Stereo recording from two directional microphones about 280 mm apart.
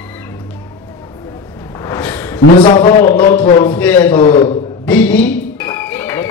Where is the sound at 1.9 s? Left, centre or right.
Centre.